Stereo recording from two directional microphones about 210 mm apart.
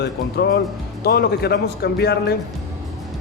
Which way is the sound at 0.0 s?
50° left (ahead or behind).